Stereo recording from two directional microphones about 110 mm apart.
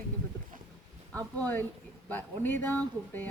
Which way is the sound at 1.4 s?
15° left (ahead or behind).